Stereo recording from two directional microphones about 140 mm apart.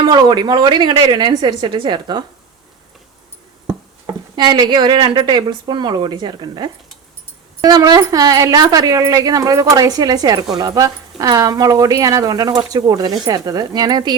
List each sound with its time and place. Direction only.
0.1 s a woman's voice: 30° right (ahead or behind)
4.4 s a woman's voice: 35° right (ahead or behind)